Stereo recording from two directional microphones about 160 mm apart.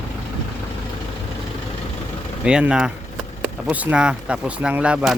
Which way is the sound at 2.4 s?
5° right (ahead or behind).